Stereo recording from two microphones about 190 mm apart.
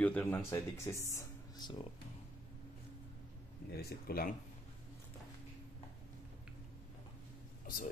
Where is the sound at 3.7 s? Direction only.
55° left (ahead or behind).